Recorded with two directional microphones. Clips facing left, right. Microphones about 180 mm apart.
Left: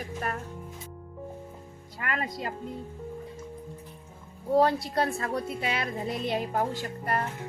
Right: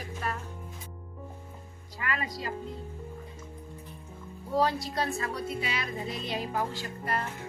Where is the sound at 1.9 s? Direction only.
50° left (ahead or behind).